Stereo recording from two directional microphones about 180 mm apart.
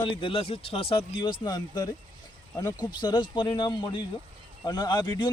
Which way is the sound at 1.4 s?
20° left (ahead or behind).